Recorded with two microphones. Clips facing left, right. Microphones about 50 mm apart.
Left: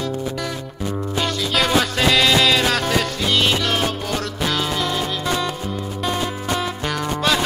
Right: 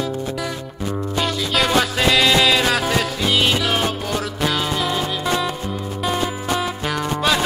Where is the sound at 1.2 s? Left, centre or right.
Centre.